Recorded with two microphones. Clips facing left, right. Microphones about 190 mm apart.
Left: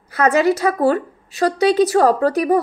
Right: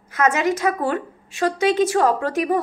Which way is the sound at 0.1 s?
35° left (ahead or behind).